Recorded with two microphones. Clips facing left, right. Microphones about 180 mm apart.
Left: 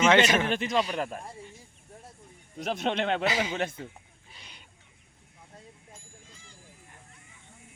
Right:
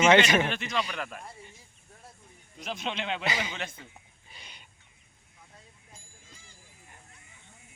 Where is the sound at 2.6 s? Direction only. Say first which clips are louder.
Left 6 dB; 60° left (ahead or behind).